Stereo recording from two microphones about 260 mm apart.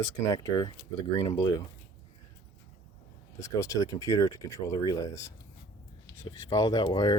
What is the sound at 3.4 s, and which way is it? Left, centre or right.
Speech, centre.